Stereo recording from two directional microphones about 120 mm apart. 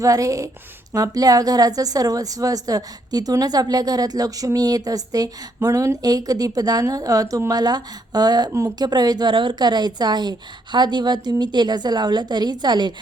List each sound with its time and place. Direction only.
0.0 s a woman's voice: 30° right (ahead or behind)